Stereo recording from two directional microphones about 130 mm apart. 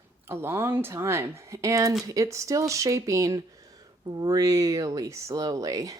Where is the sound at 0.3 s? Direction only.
20° right (ahead or behind).